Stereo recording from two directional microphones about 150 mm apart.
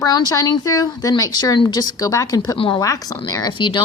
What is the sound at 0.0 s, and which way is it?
Speech, 25° left (ahead or behind).